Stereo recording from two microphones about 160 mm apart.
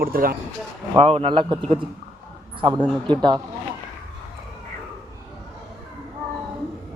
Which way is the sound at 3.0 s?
30° right (ahead or behind).